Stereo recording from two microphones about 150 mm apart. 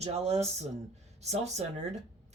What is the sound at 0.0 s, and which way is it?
Speech, 45° right (ahead or behind).